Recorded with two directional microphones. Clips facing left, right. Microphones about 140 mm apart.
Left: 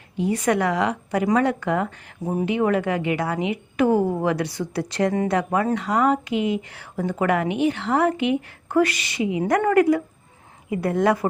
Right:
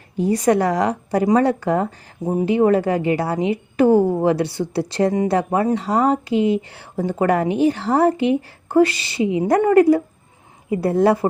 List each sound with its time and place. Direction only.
0.2 s a woman's voice: 40° right (ahead or behind)